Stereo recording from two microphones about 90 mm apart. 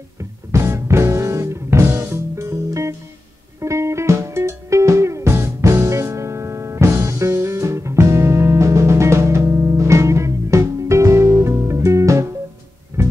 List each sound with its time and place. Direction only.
0.2 s music: 30° right (ahead or behind)